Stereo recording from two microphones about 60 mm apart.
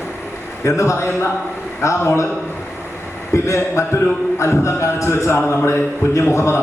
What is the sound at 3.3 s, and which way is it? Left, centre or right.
A man's voice, left.